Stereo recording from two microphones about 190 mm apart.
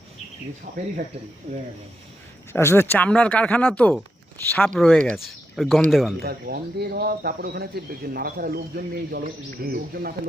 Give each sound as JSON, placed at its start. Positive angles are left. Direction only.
{"t": 2.5, "sound": "speech", "side_deg": 15}
{"t": 6.2, "sound": "speech", "side_deg": -55}